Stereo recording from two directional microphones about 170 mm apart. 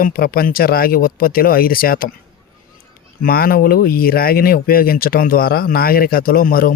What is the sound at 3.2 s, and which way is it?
Speech, 60° left (ahead or behind).